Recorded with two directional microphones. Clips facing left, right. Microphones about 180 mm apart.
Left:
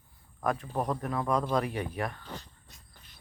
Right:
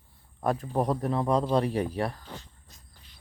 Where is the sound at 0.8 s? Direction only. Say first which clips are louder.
Right 4 dB; 30° right (ahead or behind).